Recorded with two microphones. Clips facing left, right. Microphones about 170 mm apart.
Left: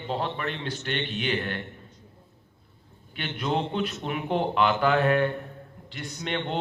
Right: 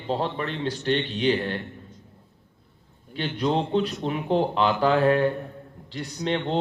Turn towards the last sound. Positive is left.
turn(degrees=-35)  # may be behind; listen again after turning